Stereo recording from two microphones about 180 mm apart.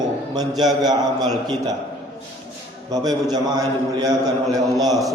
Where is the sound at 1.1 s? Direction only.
25° right (ahead or behind).